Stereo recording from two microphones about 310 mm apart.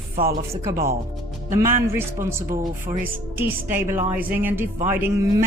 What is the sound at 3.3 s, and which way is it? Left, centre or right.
A woman's voice, centre.